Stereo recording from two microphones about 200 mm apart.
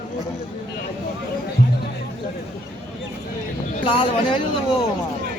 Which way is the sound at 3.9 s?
25° left (ahead or behind).